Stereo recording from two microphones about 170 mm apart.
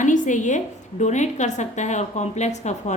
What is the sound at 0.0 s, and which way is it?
A woman's voice, 45° left (ahead or behind).